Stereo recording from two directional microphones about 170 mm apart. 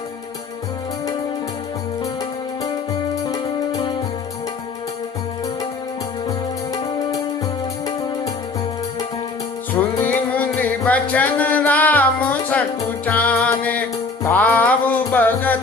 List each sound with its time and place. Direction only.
3.2 s music: 20° left (ahead or behind)
10.1 s music: 10° left (ahead or behind)